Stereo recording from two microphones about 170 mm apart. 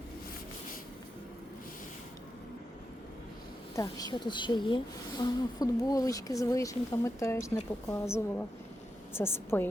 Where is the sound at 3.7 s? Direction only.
20° left (ahead or behind).